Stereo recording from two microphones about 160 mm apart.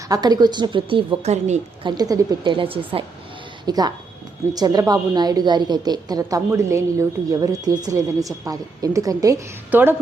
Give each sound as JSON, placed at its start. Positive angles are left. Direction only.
{"t": 0.1, "sound": "a woman's voice", "side_deg": -25}
{"t": 1.8, "sound": "a woman's voice", "side_deg": -25}